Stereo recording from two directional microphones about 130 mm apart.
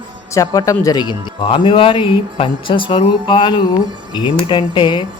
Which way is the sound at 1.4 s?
45° left (ahead or behind).